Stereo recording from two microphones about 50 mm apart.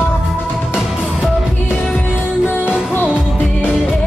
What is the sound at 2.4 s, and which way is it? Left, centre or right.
Music, left.